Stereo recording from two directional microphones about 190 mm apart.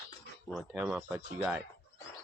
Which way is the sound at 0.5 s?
5° right (ahead or behind).